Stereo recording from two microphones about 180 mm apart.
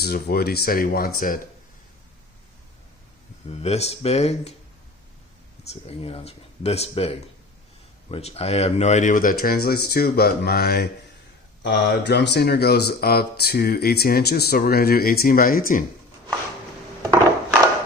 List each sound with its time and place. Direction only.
0.0 s speech: 60° left (ahead or behind)
3.5 s speech: 35° left (ahead or behind)
5.8 s speech: 35° left (ahead or behind); by 15.8 s 50° left (ahead or behind)